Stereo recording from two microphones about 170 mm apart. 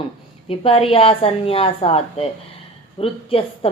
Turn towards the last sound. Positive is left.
turn(degrees=35)  # may be behind; listen again after turning